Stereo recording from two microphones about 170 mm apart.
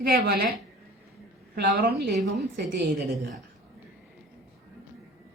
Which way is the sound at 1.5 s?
65° right (ahead or behind).